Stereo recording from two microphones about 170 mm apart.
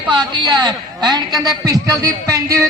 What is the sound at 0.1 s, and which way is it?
A woman's voice, 25° right (ahead or behind).